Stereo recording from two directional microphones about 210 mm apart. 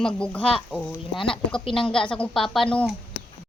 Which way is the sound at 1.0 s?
25° left (ahead or behind).